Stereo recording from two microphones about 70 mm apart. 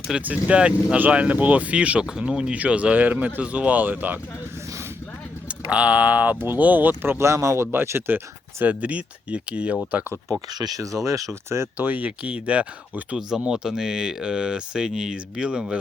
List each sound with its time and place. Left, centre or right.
0.2 s speech: centre
5.5 s speech: centre
10.5 s speech: right
11.0 s speech: right
11.8 s speech: right